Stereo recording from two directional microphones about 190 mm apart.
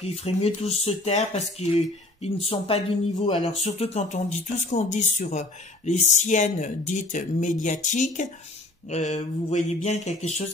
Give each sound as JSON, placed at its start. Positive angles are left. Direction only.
{"t": 0.0, "sound": "speech", "side_deg": 35}